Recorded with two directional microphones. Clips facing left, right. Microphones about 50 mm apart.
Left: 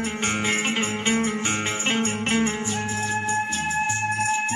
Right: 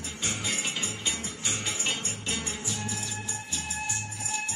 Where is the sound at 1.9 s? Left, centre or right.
Left.